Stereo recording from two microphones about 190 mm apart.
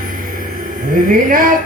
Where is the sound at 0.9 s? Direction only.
45° right (ahead or behind).